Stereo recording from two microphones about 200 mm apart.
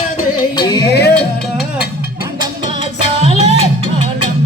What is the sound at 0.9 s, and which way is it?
Music, 55° left (ahead or behind).